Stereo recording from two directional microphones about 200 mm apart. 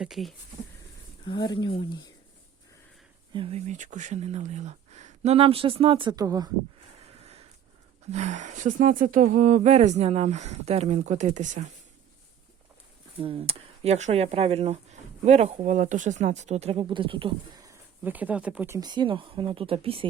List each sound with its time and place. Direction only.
0.0 s speech: centre (ahead or behind)
1.3 s speech: 25° left (ahead or behind)
3.3 s speech: 30° right (ahead or behind)
8.1 s speech: 35° right (ahead or behind)
13.2 s speech: 30° right (ahead or behind)